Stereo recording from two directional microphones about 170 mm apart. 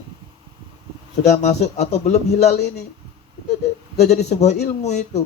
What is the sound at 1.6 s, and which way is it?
A man's voice, 40° left (ahead or behind).